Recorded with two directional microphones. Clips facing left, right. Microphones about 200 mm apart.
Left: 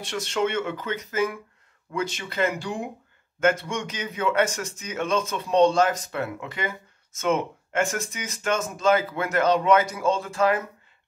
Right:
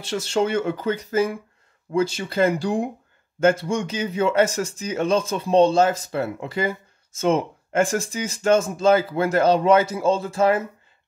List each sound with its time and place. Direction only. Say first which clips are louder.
0.1 s speech: right 4 dB; 30° right (ahead or behind)